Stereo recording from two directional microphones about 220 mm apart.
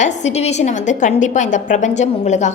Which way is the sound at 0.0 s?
30° left (ahead or behind).